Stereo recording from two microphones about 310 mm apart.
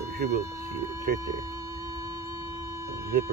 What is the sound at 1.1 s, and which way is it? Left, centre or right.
Speech, right.